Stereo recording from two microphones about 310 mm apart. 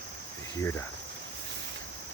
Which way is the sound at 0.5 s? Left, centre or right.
Centre.